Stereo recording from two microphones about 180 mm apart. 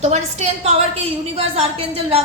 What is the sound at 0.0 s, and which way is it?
A woman's voice, 35° right (ahead or behind).